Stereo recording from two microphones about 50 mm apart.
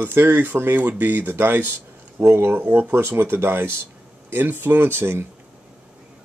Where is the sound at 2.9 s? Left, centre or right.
Right.